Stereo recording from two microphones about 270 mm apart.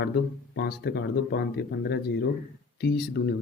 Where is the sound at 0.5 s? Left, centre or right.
Left.